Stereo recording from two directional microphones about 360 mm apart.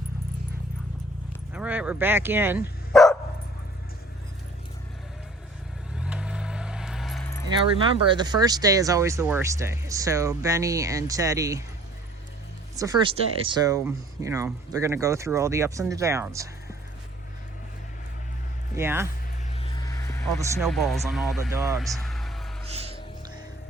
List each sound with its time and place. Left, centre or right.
1.5 s speech: centre
6.0 s vehicle: centre
7.8 s speech: centre
12.7 s speech: centre
18.8 s speech: centre
19.5 s vehicle: centre